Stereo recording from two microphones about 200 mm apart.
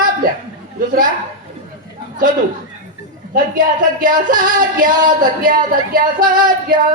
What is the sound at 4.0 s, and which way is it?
Music, 45° right (ahead or behind).